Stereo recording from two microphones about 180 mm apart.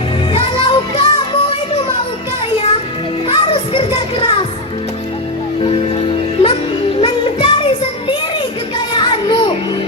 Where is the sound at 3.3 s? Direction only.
30° left (ahead or behind).